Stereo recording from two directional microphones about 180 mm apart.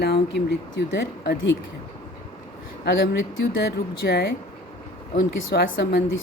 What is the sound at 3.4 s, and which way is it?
Speech, 65° left (ahead or behind).